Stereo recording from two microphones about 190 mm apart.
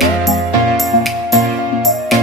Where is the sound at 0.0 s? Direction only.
Centre (ahead or behind).